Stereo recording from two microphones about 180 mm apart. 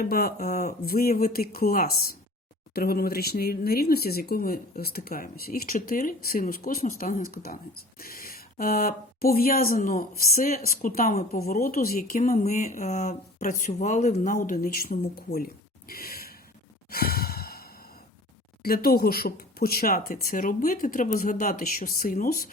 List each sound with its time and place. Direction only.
0.0 s speech: 60° left (ahead or behind)
12.4 s speech: 40° left (ahead or behind); by 15.4 s 55° left (ahead or behind)
15.9 s gasp: 55° left (ahead or behind)
16.9 s sigh: 55° left (ahead or behind)
18.6 s speech: 55° left (ahead or behind)